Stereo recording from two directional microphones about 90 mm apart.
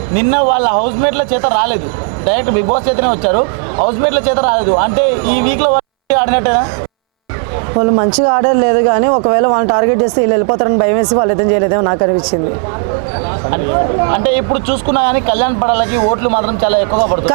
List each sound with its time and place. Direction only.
0.2 s speech: 20° right (ahead or behind)
7.8 s speech: 30° right (ahead or behind)
14.1 s speech: 20° right (ahead or behind)
16.9 s a man's voice: 35° right (ahead or behind)